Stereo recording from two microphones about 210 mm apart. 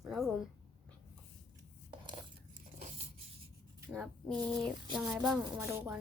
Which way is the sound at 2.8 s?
30° right (ahead or behind).